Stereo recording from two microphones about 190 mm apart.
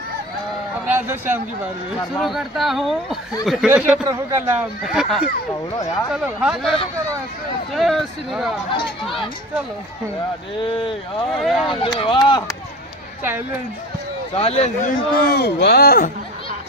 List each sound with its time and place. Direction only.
0.8 s speech: 10° right (ahead or behind)
2.1 s speech: centre (ahead or behind)
10.6 s speech: 25° left (ahead or behind)
11.3 s speech: centre (ahead or behind)
11.7 s speech: 25° left (ahead or behind)
14.3 s speech: 30° left (ahead or behind)
15.2 s speech: 60° left (ahead or behind)